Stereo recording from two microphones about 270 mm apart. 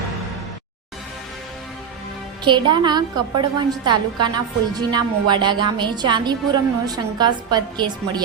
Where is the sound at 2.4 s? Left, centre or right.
Centre.